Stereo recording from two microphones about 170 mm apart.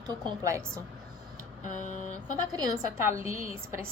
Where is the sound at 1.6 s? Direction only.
50° left (ahead or behind).